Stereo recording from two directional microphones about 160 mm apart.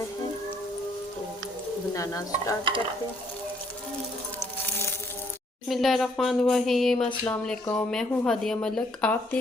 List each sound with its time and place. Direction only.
2.0 s stir: 20° left (ahead or behind)
5.6 s speech: centre (ahead or behind)